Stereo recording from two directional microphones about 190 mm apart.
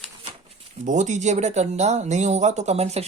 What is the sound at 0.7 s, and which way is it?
Speech, 40° right (ahead or behind).